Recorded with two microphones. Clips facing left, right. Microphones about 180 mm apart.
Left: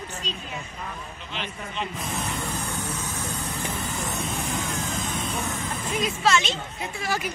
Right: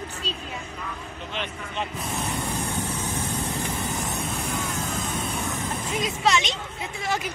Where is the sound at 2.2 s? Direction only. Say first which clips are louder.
Right 4 dB; 25° right (ahead or behind).